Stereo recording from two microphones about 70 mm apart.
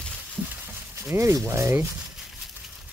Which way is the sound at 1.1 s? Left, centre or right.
Right.